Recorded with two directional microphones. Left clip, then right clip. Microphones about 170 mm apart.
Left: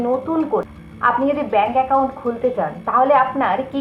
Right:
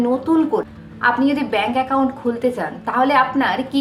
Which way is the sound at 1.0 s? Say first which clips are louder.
Even; 25° right (ahead or behind).